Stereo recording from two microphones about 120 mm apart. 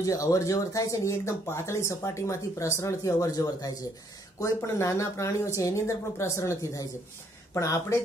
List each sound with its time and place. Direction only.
0.0 s speech: 30° left (ahead or behind)